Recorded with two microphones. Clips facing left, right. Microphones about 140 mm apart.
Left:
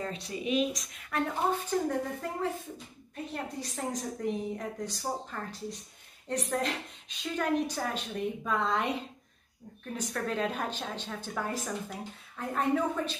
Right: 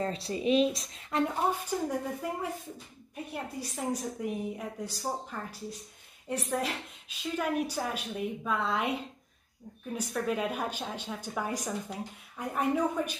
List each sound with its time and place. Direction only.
0.0 s a woman's voice: 35° right (ahead or behind)
1.2 s a woman's voice: 10° right (ahead or behind)
9.9 s a woman's voice: 10° right (ahead or behind)